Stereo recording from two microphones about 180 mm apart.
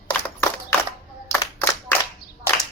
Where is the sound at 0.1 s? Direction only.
10° left (ahead or behind).